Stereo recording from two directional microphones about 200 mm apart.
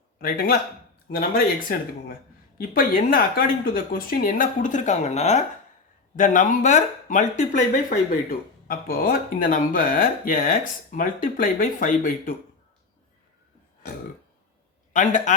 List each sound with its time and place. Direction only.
0.2 s speech: 45° left (ahead or behind)
14.9 s a man's voice: 40° left (ahead or behind)